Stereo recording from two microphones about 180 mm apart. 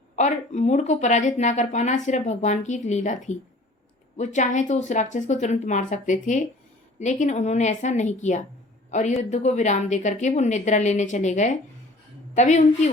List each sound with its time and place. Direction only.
0.2 s speech: 40° left (ahead or behind)